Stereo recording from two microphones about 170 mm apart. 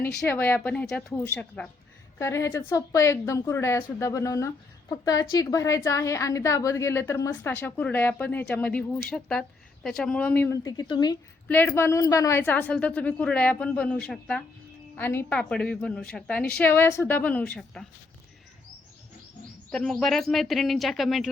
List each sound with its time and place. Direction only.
0.3 s a woman's voice: 10° left (ahead or behind); by 11.2 s 25° left (ahead or behind)
11.4 s a woman's voice: 10° left (ahead or behind)
19.7 s speech: 5° left (ahead or behind)